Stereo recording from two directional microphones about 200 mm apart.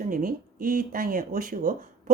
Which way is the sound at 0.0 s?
45° right (ahead or behind).